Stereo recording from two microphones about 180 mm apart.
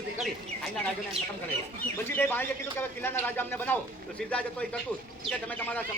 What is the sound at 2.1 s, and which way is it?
Speech, 10° left (ahead or behind).